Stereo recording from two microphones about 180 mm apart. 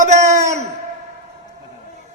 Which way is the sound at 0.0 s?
40° right (ahead or behind).